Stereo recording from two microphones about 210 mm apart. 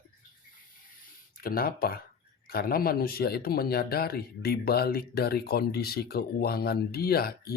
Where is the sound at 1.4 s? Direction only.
45° left (ahead or behind).